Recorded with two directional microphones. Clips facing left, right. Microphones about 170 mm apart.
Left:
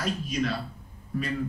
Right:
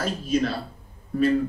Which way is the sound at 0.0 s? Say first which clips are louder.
Right 5 dB; 30° right (ahead or behind).